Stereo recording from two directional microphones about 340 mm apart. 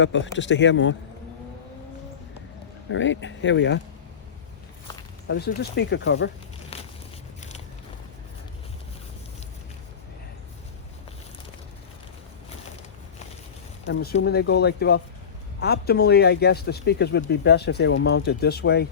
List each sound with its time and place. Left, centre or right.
0.0 s a man's voice: left
2.9 s a man's voice: left
5.3 s speech: left
13.8 s speech: left